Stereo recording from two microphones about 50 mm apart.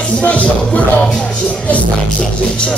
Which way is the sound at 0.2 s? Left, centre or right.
Left.